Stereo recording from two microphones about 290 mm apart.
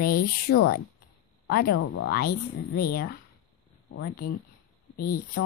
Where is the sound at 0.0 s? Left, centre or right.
Left.